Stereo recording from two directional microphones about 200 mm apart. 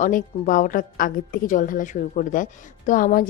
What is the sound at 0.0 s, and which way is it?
A woman's voice, 40° left (ahead or behind).